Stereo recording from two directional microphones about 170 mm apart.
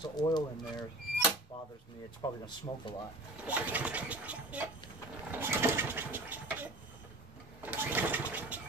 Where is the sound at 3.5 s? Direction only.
10° right (ahead or behind).